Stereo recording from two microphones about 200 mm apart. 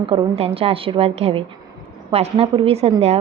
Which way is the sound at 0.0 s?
30° right (ahead or behind).